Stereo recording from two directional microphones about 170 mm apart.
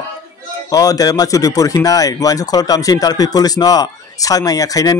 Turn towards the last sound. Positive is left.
turn(degrees=20)  # may be behind; listen again after turning